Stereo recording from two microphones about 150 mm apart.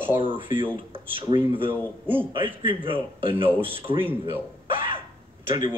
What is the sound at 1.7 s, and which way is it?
Speech, 15° right (ahead or behind).